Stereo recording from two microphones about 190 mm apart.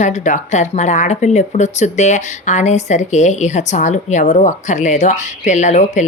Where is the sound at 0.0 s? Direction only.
40° left (ahead or behind).